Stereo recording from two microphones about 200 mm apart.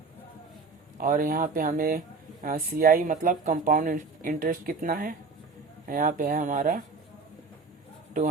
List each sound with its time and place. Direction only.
0.9 s speech: 45° right (ahead or behind)